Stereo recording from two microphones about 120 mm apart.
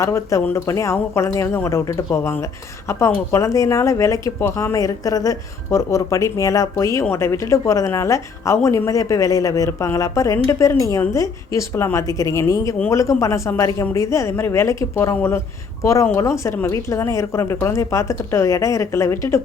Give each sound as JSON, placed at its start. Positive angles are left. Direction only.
{"t": 0.0, "sound": "speech", "side_deg": 25}